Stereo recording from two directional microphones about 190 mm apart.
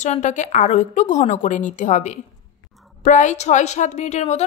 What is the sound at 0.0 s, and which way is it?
A woman's voice, 40° left (ahead or behind).